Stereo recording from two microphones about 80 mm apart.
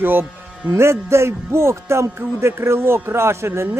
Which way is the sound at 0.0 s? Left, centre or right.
Right.